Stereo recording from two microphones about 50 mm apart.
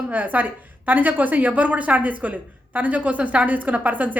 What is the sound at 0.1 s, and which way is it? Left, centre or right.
A woman's voice, right.